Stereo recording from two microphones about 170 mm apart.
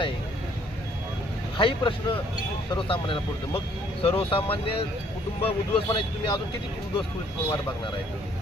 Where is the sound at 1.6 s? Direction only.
30° left (ahead or behind).